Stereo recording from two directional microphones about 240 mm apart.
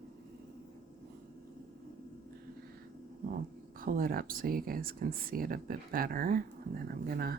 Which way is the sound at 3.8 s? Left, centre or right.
Right.